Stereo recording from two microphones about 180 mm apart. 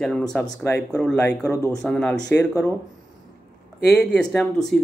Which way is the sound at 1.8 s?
5° left (ahead or behind).